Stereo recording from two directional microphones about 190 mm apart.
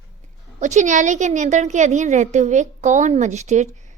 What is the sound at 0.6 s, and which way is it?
A woman's voice, 40° right (ahead or behind).